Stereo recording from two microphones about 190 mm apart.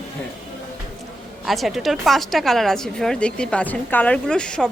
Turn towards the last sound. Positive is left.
turn(degrees=5)  # may be behind; listen again after turning